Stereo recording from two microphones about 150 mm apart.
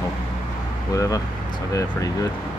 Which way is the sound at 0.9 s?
25° left (ahead or behind).